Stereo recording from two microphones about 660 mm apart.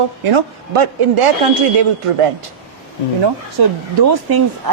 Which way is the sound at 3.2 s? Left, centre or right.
Right.